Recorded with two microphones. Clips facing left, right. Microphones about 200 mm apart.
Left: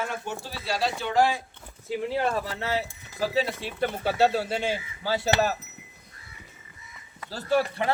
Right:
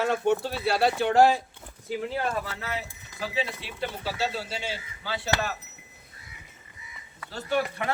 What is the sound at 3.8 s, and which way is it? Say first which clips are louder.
Speech: left 7 dB; 55° left (ahead or behind).